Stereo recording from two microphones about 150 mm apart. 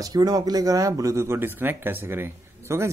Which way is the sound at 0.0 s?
25° right (ahead or behind).